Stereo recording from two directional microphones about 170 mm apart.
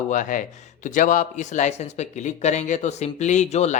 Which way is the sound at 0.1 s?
50° left (ahead or behind).